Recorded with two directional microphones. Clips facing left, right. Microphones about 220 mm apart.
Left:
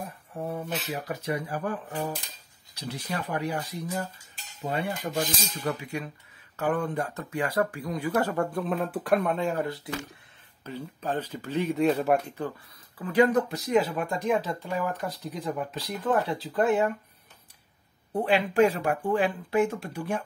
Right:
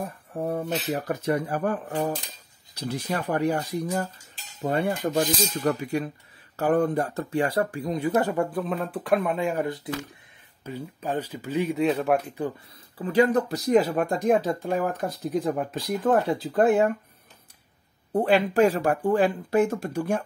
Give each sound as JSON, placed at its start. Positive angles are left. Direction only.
{"t": 0.8, "sound": "speech", "side_deg": -50}
{"t": 13.0, "sound": "speech", "side_deg": -30}
{"t": 18.1, "sound": "speech", "side_deg": -40}